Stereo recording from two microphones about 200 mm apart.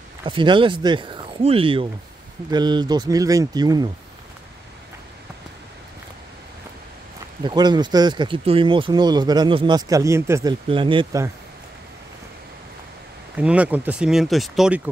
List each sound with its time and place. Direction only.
0.2 s speech: 25° right (ahead or behind)
7.4 s speech: 20° right (ahead or behind)
10.7 s speech: 25° right (ahead or behind)
13.4 s speech: 5° right (ahead or behind)